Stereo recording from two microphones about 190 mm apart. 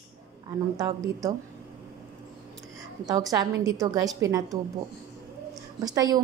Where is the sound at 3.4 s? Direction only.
20° right (ahead or behind).